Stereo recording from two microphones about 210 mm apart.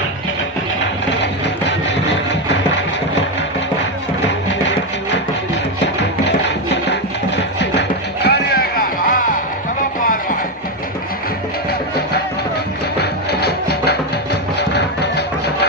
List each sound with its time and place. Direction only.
1.7 s a sound: 55° left (ahead or behind)
6.7 s music: 55° left (ahead or behind); by 9.4 s 40° left (ahead or behind)
13.0 s music: 50° left (ahead or behind)